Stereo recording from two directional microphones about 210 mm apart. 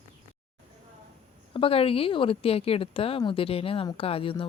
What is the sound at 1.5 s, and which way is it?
Speech, 25° left (ahead or behind).